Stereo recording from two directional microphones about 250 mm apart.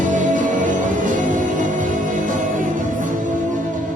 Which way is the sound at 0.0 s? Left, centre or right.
Right.